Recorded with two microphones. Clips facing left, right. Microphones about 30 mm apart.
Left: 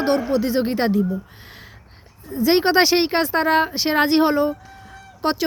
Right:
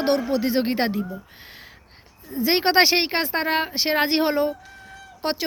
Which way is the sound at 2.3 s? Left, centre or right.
Centre.